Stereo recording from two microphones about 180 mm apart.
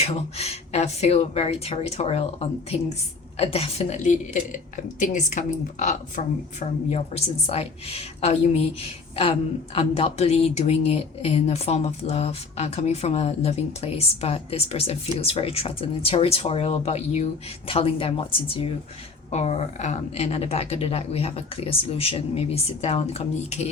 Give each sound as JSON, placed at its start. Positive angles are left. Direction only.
{"t": 0.0, "sound": "speech", "side_deg": 35}
{"t": 9.7, "sound": "speech", "side_deg": 35}